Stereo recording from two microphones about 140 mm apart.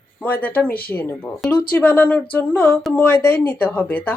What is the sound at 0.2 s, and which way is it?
A woman's voice, 10° left (ahead or behind).